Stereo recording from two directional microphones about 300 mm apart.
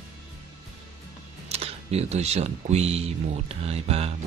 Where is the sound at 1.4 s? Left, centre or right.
Centre.